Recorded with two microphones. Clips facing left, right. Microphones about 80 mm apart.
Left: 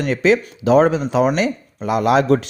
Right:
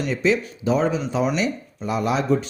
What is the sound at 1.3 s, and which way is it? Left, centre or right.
Speech, left.